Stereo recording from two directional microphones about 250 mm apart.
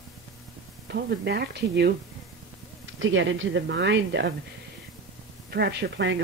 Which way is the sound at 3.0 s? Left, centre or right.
Right.